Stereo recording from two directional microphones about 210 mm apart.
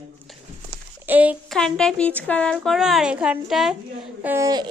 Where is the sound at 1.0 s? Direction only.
10° right (ahead or behind).